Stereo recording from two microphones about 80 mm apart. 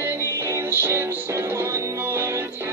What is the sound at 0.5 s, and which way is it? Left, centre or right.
Music, right.